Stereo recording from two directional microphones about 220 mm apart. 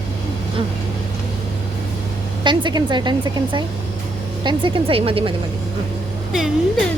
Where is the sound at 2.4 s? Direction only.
20° right (ahead or behind).